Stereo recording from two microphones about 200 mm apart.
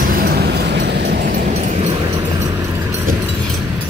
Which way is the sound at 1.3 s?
35° right (ahead or behind).